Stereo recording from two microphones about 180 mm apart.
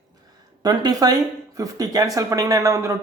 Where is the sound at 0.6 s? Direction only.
20° right (ahead or behind).